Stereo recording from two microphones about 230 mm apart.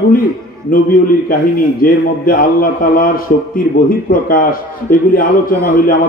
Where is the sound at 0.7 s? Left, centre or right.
Left.